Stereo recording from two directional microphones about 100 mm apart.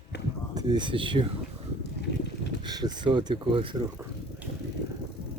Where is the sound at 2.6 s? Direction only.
45° right (ahead or behind).